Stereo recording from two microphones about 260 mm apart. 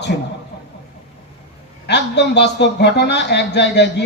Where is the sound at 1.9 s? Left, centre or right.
Left.